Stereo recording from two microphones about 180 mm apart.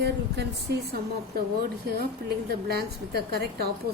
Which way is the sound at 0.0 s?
65° right (ahead or behind).